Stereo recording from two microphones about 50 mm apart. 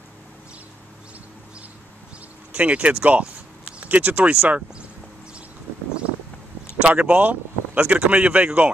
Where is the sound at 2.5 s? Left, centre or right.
Right.